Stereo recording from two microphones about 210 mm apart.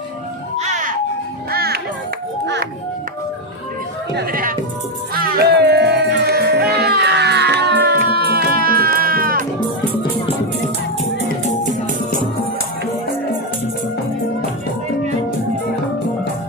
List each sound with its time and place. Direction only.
0.5 s music: 35° right (ahead or behind)
1.5 s music: 50° right (ahead or behind)
4.1 s speech: 45° right (ahead or behind)
5.1 s music: 45° right (ahead or behind)